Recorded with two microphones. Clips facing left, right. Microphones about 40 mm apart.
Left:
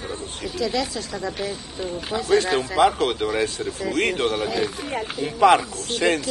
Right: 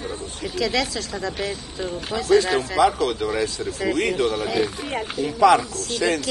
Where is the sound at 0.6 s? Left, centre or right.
Right.